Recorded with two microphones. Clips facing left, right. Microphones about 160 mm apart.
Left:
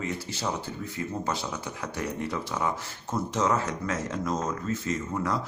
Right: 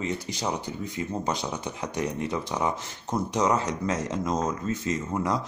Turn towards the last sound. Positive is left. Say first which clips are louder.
# right 2 dB
turn(degrees=-20)  # may be behind; listen again after turning